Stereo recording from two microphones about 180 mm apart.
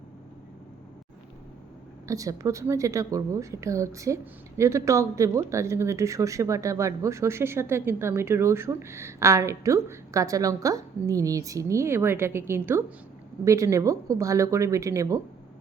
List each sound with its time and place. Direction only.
2.0 s a woman's voice: 20° right (ahead or behind)